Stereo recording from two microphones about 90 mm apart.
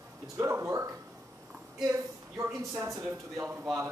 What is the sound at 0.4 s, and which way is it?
Speech, 35° right (ahead or behind).